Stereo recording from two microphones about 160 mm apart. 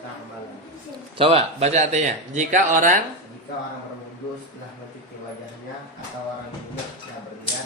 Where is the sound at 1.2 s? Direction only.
35° right (ahead or behind); by 3.0 s 55° right (ahead or behind).